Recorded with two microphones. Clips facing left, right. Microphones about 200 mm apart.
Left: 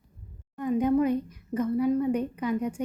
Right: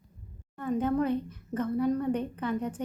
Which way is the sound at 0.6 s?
15° left (ahead or behind).